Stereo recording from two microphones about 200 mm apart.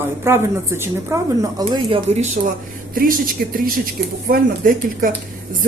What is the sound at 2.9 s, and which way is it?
Speech, 45° right (ahead or behind).